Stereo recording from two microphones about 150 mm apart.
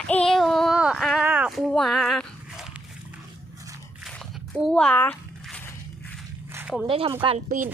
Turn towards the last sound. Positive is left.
turn(degrees=-60)  # may be behind; listen again after turning